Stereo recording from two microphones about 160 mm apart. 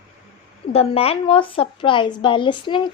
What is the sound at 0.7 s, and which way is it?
A woman's voice, 40° left (ahead or behind).